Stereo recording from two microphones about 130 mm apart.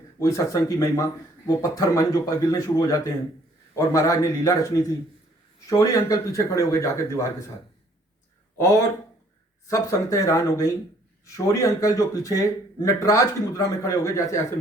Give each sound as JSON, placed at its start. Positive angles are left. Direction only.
{"t": 0.2, "sound": "speech", "side_deg": 25}
{"t": 8.5, "sound": "speech", "side_deg": 20}